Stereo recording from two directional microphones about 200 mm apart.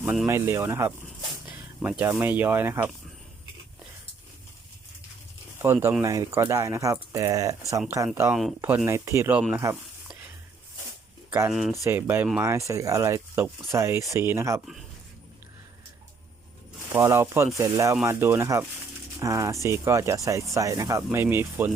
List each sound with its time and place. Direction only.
0.0 s speech: 10° right (ahead or behind)
5.5 s speech: 10° right (ahead or behind)
9.5 s snake: 10° right (ahead or behind)
11.3 s speech: 15° right (ahead or behind)
16.9 s speech: 15° right (ahead or behind)